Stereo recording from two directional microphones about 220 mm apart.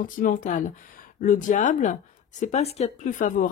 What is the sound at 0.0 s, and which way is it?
Speech, 40° left (ahead or behind).